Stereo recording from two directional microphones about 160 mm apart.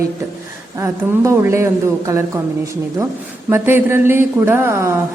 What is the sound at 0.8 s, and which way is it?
A woman's voice, 20° right (ahead or behind).